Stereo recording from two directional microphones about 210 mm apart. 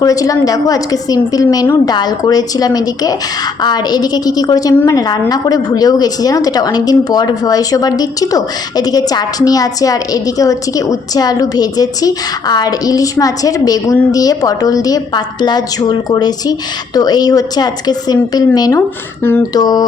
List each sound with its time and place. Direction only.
0.0 s a woman's voice: 15° left (ahead or behind)